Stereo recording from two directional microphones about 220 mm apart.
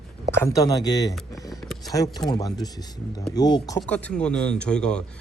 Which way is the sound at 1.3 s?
15° left (ahead or behind).